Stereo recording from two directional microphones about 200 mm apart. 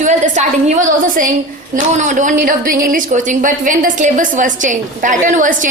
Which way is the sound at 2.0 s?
40° right (ahead or behind).